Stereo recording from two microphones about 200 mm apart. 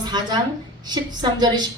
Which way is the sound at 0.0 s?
20° right (ahead or behind).